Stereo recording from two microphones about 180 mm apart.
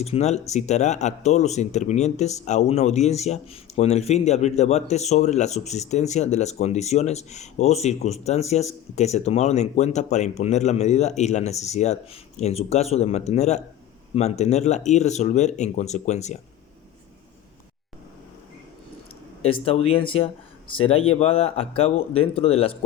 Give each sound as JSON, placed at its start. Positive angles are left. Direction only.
{"t": 0.0, "sound": "speech", "side_deg": 35}
{"t": 19.4, "sound": "speech", "side_deg": 30}